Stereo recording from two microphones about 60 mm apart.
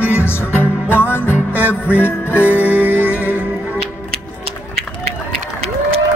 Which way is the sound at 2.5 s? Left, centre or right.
Right.